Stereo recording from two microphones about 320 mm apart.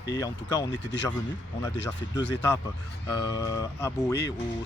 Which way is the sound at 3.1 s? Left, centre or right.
Centre.